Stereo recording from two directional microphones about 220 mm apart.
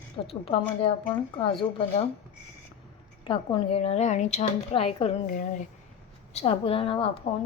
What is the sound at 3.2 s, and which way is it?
Speech, 20° left (ahead or behind).